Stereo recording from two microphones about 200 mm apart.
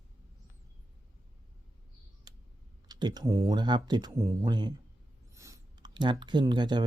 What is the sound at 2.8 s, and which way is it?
Speech, 20° right (ahead or behind).